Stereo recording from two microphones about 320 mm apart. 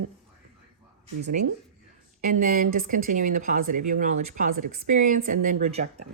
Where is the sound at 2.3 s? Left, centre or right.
Right.